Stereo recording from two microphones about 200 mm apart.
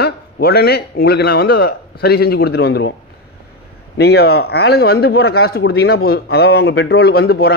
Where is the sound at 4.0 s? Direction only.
50° left (ahead or behind).